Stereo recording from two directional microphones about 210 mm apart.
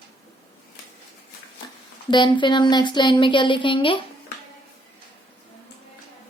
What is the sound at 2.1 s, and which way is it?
Speech, 20° left (ahead or behind).